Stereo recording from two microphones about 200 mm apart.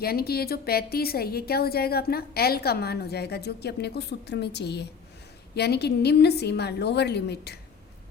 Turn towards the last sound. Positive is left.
turn(degrees=55)  # may be behind; listen again after turning